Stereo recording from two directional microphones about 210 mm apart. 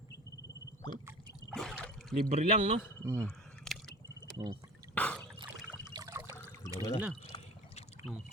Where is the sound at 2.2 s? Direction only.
30° right (ahead or behind).